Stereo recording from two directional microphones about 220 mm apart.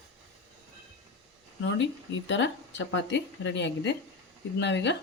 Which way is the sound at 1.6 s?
55° left (ahead or behind).